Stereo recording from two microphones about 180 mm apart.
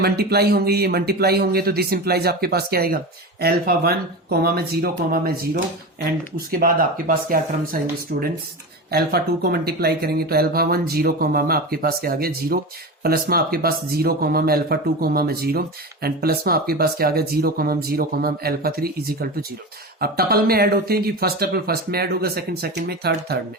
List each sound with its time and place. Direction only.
0.0 s speech: 60° right (ahead or behind)
6.3 s speech: 55° right (ahead or behind)